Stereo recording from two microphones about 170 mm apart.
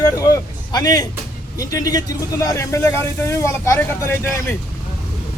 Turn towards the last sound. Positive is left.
turn(degrees=15)  # may be behind; listen again after turning